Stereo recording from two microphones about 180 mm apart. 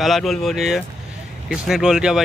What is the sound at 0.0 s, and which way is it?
Speech, centre (ahead or behind).